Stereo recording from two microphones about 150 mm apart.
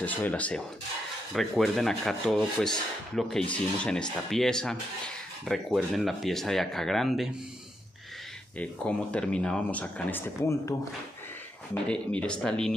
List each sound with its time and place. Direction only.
0.0 s speech: 10° left (ahead or behind)
8.5 s speech: 10° left (ahead or behind)
11.9 s speech: 5° left (ahead or behind)